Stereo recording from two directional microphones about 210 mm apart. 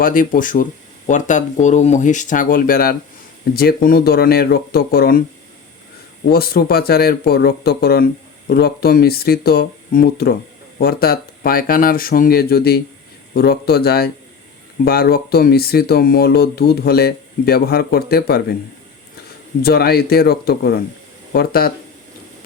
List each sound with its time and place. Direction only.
0.0 s speech: 40° left (ahead or behind)
6.3 s speech: 45° left (ahead or behind)
19.6 s speech: 50° left (ahead or behind)